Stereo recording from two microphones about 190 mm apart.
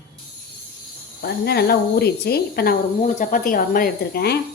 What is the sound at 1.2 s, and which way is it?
Speech, 55° left (ahead or behind).